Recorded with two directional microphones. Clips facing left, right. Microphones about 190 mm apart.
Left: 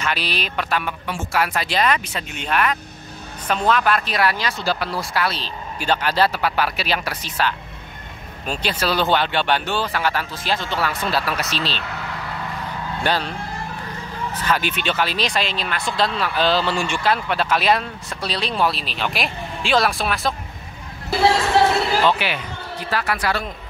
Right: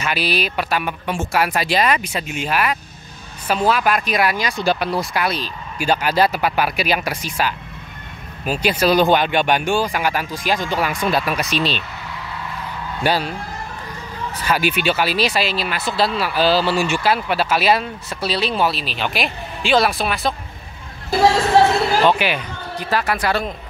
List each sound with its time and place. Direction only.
0.0 s speech: 10° right (ahead or behind)
13.0 s speech: 10° right (ahead or behind)
14.4 s speech: 10° right (ahead or behind)
22.0 s a man's voice: 15° right (ahead or behind)